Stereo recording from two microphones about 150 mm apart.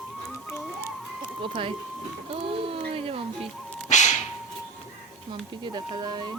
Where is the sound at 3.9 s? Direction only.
50° left (ahead or behind).